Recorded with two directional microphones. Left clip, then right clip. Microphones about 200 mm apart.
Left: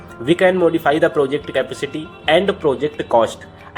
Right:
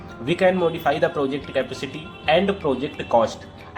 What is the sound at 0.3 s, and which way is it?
Speech, 35° left (ahead or behind).